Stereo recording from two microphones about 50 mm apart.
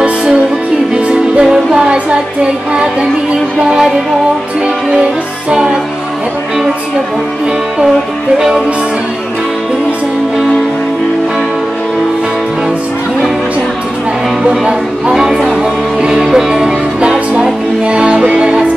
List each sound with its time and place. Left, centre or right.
0.0 s music: centre
5.5 s music: centre
8.4 s music: centre
14.4 s music: centre
17.8 s music: right